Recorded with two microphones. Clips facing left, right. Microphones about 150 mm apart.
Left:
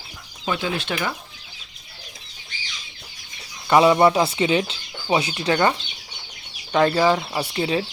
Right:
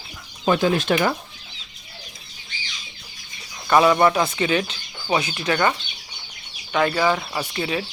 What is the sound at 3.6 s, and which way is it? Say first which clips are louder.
Speech: left 1 dB; 20° left (ahead or behind).